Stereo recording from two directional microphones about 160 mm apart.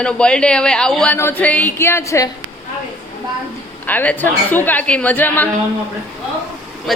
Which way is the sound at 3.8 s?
10° left (ahead or behind).